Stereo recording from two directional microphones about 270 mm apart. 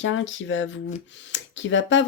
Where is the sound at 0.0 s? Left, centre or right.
Left.